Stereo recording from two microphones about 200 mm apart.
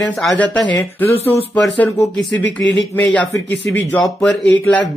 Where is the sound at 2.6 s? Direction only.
65° left (ahead or behind).